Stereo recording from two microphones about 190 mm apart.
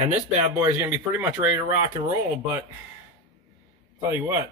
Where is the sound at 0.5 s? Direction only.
15° right (ahead or behind).